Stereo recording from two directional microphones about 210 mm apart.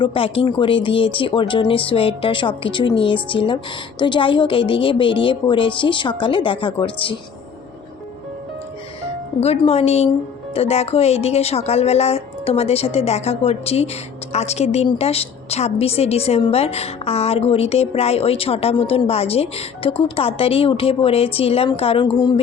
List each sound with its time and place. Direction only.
0.0 s a woman's voice: 25° left (ahead or behind)
9.4 s a woman's voice: 30° left (ahead or behind)